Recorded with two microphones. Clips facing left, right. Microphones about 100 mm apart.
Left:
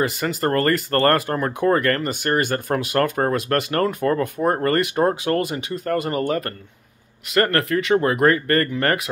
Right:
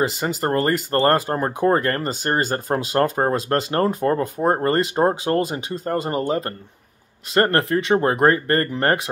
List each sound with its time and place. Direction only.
0.0 s speech: 25° right (ahead or behind)